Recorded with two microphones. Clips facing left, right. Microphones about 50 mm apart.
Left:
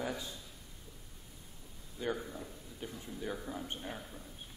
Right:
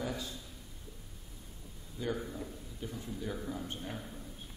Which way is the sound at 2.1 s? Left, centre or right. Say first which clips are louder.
Right 3 dB; centre.